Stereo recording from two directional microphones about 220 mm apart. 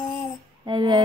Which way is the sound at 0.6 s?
20° right (ahead or behind).